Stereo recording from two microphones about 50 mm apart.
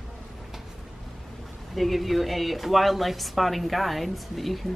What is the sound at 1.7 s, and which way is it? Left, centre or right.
A woman's voice, centre.